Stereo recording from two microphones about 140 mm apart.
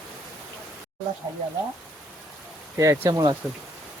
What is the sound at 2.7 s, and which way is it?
Speech, 20° right (ahead or behind).